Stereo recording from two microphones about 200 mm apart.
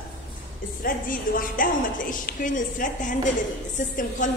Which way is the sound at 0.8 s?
45° left (ahead or behind).